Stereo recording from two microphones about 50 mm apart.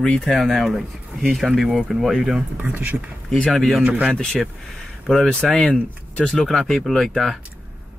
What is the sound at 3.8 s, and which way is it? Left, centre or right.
Speech, right.